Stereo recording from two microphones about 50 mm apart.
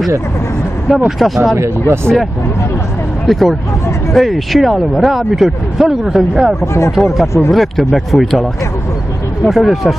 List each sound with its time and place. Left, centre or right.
0.8 s speech: centre
3.3 s a man's voice: centre
6.6 s speech: left
7.0 s speech: centre